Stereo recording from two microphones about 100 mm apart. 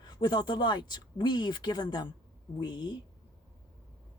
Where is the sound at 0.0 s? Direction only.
45° left (ahead or behind).